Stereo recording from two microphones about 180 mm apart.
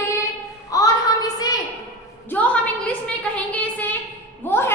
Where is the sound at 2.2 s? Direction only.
10° left (ahead or behind).